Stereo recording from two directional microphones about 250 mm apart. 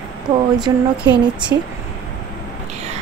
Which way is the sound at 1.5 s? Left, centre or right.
Right.